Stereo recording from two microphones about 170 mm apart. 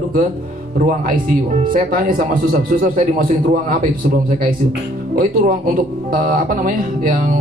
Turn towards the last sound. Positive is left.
turn(degrees=-50)  # may be behind; listen again after turning